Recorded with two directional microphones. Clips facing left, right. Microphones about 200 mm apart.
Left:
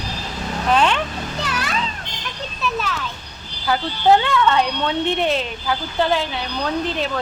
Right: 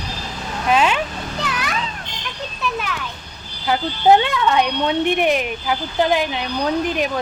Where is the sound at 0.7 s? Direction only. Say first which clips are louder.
Right 1 dB; 10° right (ahead or behind).